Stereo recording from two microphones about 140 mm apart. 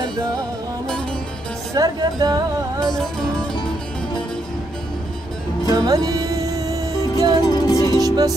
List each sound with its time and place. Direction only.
1.8 s music: 25° right (ahead or behind)
2.8 s music: 5° left (ahead or behind)
5.7 s music: 25° right (ahead or behind)
7.4 s music: 30° left (ahead or behind)